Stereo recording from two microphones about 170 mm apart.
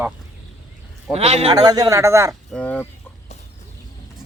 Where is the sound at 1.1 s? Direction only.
35° right (ahead or behind).